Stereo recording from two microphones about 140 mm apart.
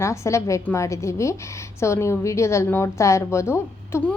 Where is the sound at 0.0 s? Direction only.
20° left (ahead or behind).